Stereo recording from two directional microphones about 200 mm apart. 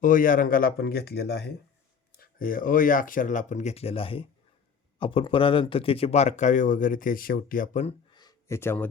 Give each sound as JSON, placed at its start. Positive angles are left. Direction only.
{"t": 0.0, "sound": "speech", "side_deg": 45}
{"t": 2.1, "sound": "speech", "side_deg": 45}
{"t": 8.1, "sound": "a sound", "side_deg": 20}